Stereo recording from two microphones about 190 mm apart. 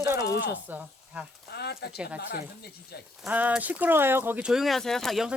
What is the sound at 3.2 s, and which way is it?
Speech, 10° right (ahead or behind).